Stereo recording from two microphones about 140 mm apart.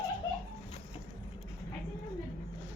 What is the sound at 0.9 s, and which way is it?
Vehicle, 45° left (ahead or behind).